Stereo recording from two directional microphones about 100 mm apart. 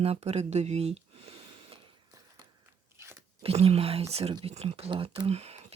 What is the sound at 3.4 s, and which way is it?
Speech, 80° right.